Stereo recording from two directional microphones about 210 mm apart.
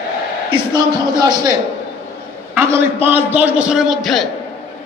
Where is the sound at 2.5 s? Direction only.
10° right (ahead or behind).